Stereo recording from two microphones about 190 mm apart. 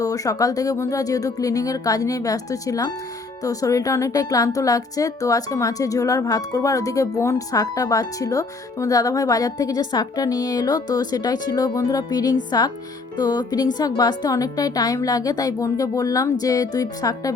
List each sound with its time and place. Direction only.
0.0 s a woman's voice: 20° left (ahead or behind)